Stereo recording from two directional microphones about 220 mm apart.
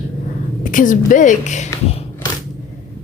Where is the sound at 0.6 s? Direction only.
35° left (ahead or behind).